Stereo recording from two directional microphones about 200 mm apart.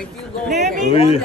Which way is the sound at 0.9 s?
30° left (ahead or behind).